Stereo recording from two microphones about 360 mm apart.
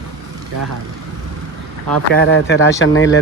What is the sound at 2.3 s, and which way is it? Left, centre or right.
Speech, left.